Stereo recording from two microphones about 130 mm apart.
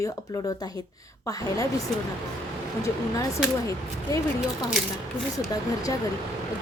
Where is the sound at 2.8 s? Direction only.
25° left (ahead or behind).